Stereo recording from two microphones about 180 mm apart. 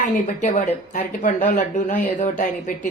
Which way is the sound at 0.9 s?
45° left (ahead or behind).